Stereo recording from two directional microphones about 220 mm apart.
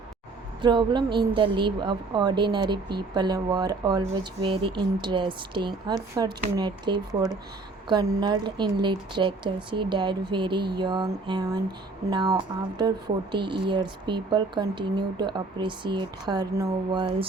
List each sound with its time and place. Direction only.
0.6 s a woman's voice: 20° right (ahead or behind)